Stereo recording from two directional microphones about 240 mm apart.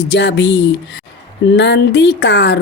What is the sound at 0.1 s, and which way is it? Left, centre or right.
Speech, left.